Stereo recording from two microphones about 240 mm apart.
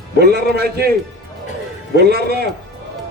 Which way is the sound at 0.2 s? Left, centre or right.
Right.